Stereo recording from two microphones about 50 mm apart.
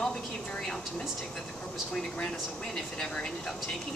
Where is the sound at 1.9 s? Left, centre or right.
Centre.